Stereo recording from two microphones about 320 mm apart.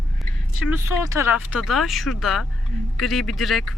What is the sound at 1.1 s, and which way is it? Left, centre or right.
Speech, centre.